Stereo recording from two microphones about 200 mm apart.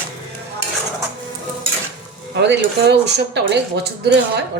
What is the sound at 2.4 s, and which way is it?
A woman's voice, 60° right (ahead or behind).